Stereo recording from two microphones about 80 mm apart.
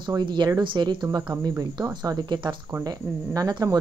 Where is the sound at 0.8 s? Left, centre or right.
Right.